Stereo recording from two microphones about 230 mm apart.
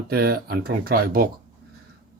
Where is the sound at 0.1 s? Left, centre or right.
Right.